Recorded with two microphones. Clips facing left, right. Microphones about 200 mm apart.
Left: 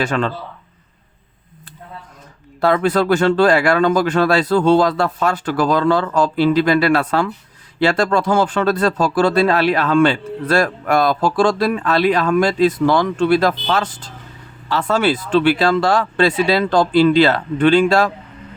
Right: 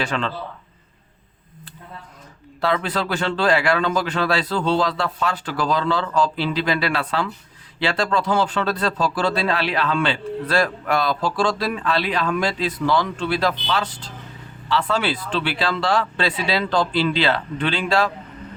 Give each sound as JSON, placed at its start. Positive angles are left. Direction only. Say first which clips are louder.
{"t": 0.0, "sound": "speech", "louder": "left 5 dB", "side_deg": 50}
{"t": 2.6, "sound": "speech", "louder": "left 7 dB", "side_deg": 45}